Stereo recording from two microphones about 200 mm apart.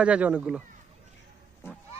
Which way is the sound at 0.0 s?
5° right (ahead or behind).